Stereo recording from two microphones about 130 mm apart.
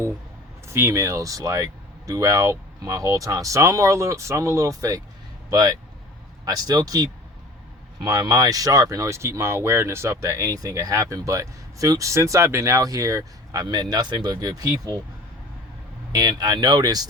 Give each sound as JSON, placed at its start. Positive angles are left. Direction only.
{"t": 0.7, "sound": "speech", "side_deg": -20}
{"t": 16.1, "sound": "speech", "side_deg": -30}